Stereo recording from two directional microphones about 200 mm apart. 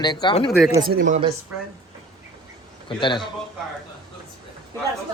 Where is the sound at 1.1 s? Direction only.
35° right (ahead or behind).